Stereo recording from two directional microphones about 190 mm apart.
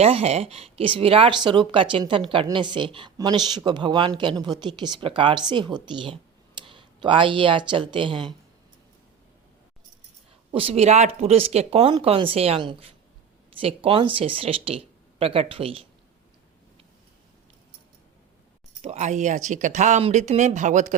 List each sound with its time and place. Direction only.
0.0 s speech: 30° right (ahead or behind)
10.5 s speech: 30° right (ahead or behind)
18.8 s speech: 35° right (ahead or behind)